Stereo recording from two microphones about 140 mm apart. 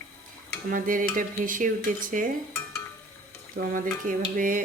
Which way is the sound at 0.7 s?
75° right (ahead or behind).